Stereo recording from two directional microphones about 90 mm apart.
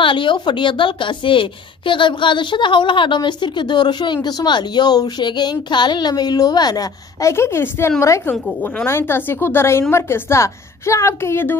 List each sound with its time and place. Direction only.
0.0 s a woman's voice: 65° left (ahead or behind); by 11.5 s 25° left (ahead or behind)